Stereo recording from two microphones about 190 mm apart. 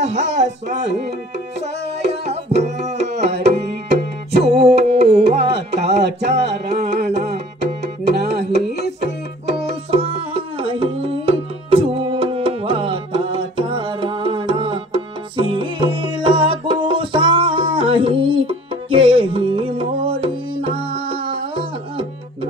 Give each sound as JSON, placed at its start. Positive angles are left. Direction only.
{"t": 0.0, "sound": "music", "side_deg": -70}
{"t": 2.9, "sound": "tabla", "side_deg": -60}
{"t": 4.4, "sound": "music", "side_deg": -60}
{"t": 9.8, "sound": "music", "side_deg": -30}